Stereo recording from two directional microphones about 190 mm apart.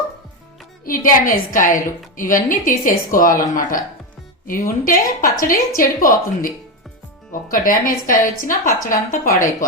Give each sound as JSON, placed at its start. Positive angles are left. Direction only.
{"t": 0.9, "sound": "speech", "side_deg": 45}